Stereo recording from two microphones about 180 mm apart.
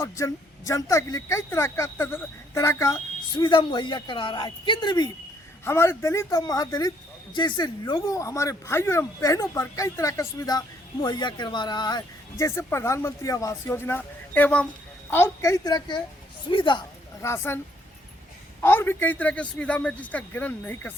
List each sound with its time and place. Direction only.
0.0 s speech: 15° left (ahead or behind)
17.2 s speech: 15° left (ahead or behind)
18.6 s speech: 10° left (ahead or behind)